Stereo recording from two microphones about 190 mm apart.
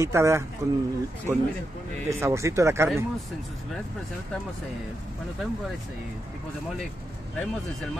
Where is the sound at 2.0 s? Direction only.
15° right (ahead or behind).